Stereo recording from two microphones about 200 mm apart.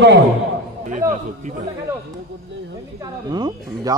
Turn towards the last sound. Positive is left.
turn(degrees=-20)  # may be behind; listen again after turning